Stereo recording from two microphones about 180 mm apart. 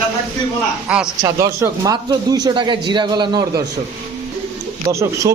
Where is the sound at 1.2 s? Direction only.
20° right (ahead or behind).